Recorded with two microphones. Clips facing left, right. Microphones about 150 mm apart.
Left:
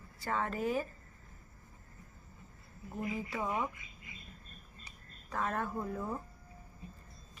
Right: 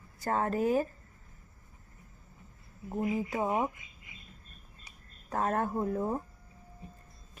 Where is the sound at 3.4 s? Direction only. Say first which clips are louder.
Right 5 dB; 30° right (ahead or behind).